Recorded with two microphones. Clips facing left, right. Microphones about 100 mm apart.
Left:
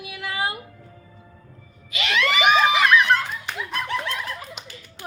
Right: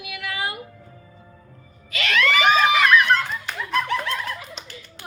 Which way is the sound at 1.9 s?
20° left (ahead or behind).